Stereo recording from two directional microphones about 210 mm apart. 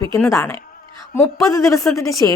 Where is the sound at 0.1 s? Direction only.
15° left (ahead or behind).